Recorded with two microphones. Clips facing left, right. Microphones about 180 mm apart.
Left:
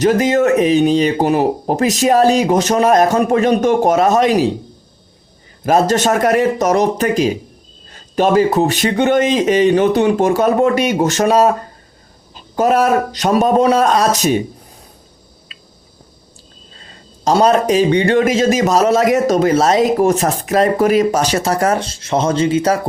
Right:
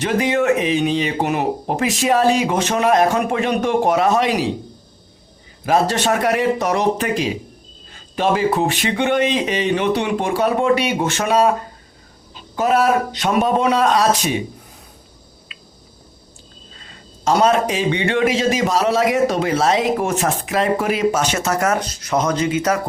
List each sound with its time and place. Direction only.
0.0 s a man's voice: 40° left (ahead or behind)
5.6 s speech: 45° left (ahead or behind)
15.5 s a sound: 40° left (ahead or behind)
17.2 s a man's voice: 35° left (ahead or behind)